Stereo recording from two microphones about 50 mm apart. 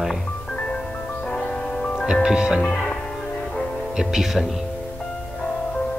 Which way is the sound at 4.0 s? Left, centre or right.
Centre.